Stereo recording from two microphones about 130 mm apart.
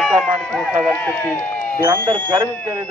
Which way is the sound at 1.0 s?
10° left (ahead or behind).